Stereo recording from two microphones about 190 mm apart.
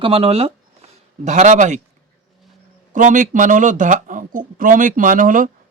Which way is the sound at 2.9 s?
40° right (ahead or behind).